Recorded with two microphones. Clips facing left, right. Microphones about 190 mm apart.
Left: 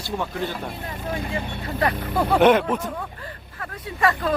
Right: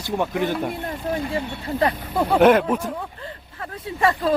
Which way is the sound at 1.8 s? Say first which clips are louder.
Right 1 dB; 25° right (ahead or behind).